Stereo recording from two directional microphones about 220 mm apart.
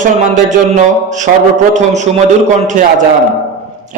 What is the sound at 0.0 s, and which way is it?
A man's voice, 35° right (ahead or behind).